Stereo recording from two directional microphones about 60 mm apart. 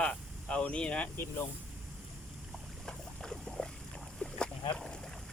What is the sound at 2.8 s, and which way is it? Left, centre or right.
Boat, centre.